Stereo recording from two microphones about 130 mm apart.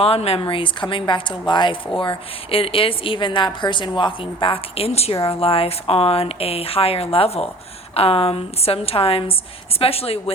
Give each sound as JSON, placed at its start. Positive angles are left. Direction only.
{"t": 0.0, "sound": "speech", "side_deg": 50}